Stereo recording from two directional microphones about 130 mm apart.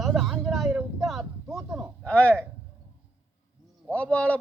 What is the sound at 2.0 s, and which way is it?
Speech, 10° left (ahead or behind).